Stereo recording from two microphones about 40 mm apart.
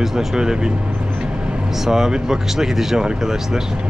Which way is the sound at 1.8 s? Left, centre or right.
Centre.